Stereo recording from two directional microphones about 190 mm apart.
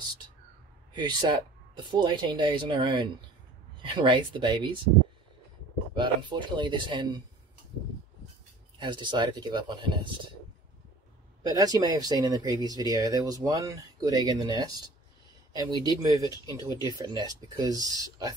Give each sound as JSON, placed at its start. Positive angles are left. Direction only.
{"t": 0.9, "sound": "speech", "side_deg": -20}
{"t": 5.9, "sound": "speech", "side_deg": -25}
{"t": 8.7, "sound": "speech", "side_deg": -25}
{"t": 11.4, "sound": "speech", "side_deg": -20}
{"t": 16.5, "sound": "speech", "side_deg": 20}
{"t": 16.8, "sound": "speech", "side_deg": -20}